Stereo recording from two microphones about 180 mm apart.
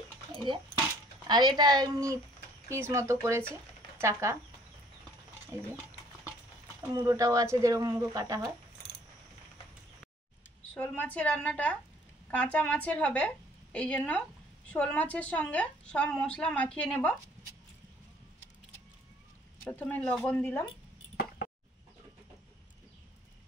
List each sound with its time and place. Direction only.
0.3 s bathtub: 25° right (ahead or behind)
1.2 s speech: 25° right (ahead or behind)
5.5 s speech: 15° right (ahead or behind)
6.8 s speech: 15° right (ahead or behind)
10.7 s a woman's voice: 10° left (ahead or behind)
19.6 s a woman's voice: 10° left (ahead or behind)